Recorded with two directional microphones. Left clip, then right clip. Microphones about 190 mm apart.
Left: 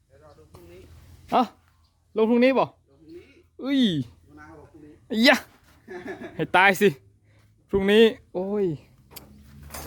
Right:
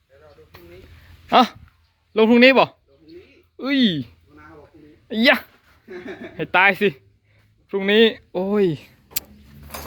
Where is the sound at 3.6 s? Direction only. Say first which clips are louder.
Right 4 dB; 10° left (ahead or behind).